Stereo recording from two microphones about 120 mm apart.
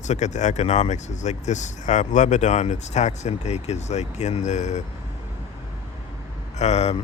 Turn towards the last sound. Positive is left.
turn(degrees=65)  # may be behind; listen again after turning